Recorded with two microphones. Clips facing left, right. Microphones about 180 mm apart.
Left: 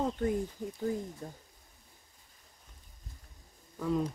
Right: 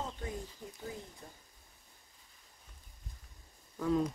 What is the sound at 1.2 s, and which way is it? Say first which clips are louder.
Speech: left 9 dB; 45° left (ahead or behind).